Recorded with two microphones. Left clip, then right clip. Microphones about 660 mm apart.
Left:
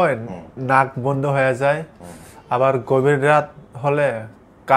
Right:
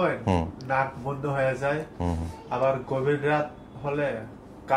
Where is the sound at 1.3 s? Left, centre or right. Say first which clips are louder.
Left 7 dB; left.